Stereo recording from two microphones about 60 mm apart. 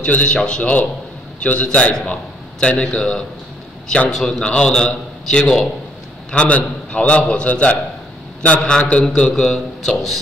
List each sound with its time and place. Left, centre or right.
0.0 s a man's voice: left